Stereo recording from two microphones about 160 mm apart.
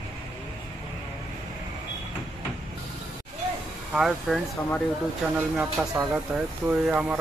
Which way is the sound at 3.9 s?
Centre (ahead or behind).